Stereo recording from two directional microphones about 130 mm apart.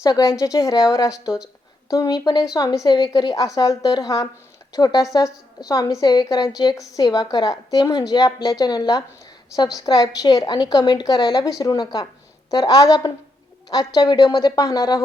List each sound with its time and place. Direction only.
0.0 s a woman's voice: 30° left (ahead or behind)